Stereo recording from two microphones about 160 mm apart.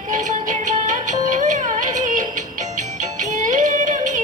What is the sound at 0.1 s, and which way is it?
Music, 50° right (ahead or behind).